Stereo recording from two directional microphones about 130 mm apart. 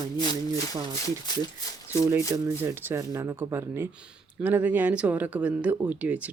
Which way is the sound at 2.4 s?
20° right (ahead or behind).